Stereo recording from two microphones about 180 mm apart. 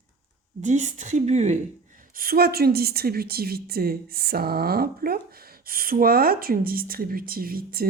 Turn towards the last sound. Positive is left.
turn(degrees=-55)  # may be behind; listen again after turning